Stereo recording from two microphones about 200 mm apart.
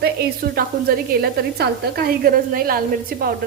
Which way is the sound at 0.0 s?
50° right (ahead or behind).